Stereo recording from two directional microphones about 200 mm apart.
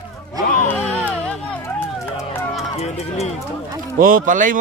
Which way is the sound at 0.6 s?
10° left (ahead or behind).